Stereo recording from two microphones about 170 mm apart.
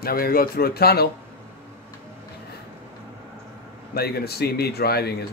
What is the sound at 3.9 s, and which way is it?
A man's voice, 65° left (ahead or behind).